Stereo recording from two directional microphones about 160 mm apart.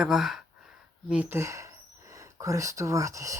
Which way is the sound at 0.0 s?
5° right (ahead or behind).